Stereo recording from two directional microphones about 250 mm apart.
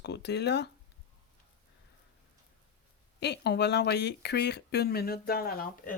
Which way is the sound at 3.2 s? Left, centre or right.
Left.